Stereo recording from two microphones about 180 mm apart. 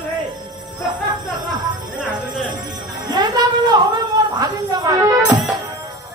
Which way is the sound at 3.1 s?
25° right (ahead or behind).